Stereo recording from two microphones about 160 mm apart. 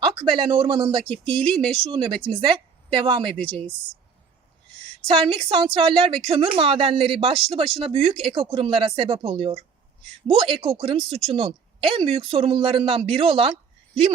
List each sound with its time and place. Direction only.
0.0 s speech: 30° right (ahead or behind)
5.0 s speech: 35° right (ahead or behind)